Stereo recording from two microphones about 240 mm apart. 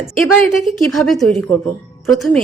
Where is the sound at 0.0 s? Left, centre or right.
Centre.